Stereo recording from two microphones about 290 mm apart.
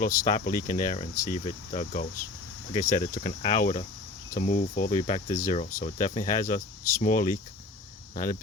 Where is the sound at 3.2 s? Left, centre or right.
Left.